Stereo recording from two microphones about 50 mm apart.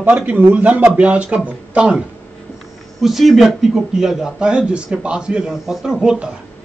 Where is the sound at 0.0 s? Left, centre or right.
Right.